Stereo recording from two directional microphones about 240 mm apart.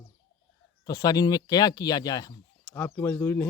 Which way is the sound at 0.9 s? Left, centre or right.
Centre.